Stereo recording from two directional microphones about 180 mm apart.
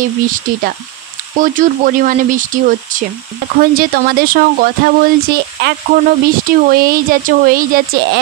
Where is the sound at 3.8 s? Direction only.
55° right (ahead or behind).